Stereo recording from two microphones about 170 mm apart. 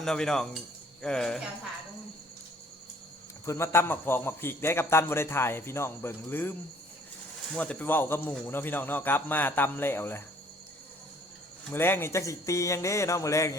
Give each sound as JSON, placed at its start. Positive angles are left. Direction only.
{"t": 0.0, "sound": "speech", "side_deg": 5}
{"t": 3.4, "sound": "a man's voice", "side_deg": 15}
{"t": 11.7, "sound": "a man's voice", "side_deg": 15}